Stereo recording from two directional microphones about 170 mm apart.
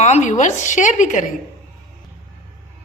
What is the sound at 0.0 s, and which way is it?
A woman's voice, 45° left (ahead or behind).